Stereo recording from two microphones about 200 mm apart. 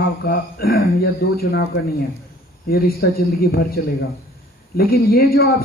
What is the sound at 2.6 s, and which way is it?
Speech, 50° left (ahead or behind).